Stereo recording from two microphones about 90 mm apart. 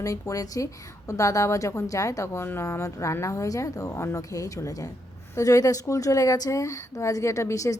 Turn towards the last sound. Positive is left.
turn(degrees=35)  # may be behind; listen again after turning